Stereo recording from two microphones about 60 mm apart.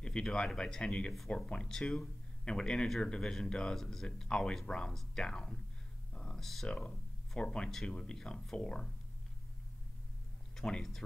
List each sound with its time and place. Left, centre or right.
0.0 s speech: centre
6.1 s a sound: centre
6.4 s speech: centre
7.3 s speech: centre
10.5 s speech: centre